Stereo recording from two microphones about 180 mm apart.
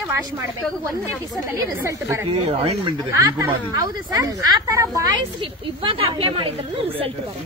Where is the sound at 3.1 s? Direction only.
20° right (ahead or behind).